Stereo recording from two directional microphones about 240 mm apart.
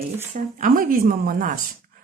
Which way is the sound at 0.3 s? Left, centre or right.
Right.